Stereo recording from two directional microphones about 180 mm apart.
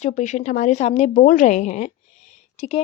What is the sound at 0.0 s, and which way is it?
A woman's voice, 40° left (ahead or behind).